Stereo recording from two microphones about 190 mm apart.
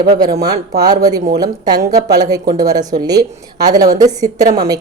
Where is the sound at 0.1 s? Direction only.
20° right (ahead or behind).